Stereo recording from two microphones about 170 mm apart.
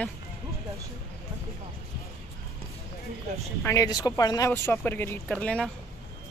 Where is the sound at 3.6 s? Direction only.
20° left (ahead or behind).